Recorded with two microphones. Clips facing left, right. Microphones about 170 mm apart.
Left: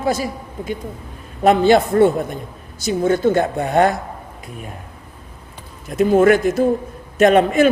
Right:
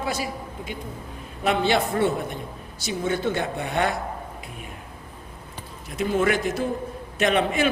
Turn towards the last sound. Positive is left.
turn(degrees=45)  # may be behind; listen again after turning